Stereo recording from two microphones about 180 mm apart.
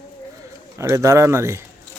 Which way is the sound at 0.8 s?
15° right (ahead or behind).